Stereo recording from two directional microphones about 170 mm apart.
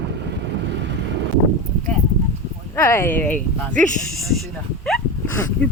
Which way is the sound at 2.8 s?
15° left (ahead or behind).